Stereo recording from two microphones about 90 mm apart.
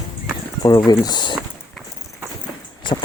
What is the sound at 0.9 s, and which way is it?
Speech, 55° left (ahead or behind).